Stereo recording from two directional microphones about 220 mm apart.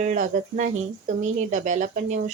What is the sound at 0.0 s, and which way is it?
Speech, 35° right (ahead or behind).